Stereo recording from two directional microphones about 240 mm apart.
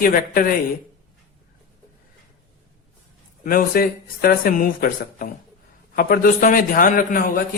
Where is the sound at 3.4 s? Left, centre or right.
Left.